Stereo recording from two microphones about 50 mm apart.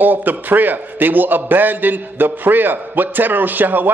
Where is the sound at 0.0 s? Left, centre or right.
Right.